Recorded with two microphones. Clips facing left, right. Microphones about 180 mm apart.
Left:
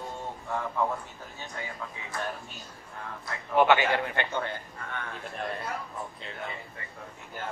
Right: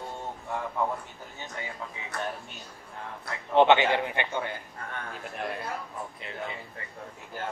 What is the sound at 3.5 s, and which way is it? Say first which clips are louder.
Speech: right 2 dB; 25° right (ahead or behind).